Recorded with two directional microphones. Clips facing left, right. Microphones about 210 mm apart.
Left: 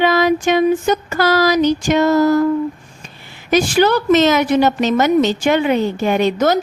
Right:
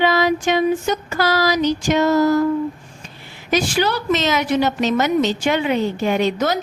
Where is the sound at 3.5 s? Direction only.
50° left (ahead or behind).